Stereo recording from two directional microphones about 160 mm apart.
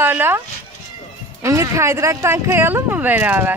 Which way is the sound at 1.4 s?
20° right (ahead or behind).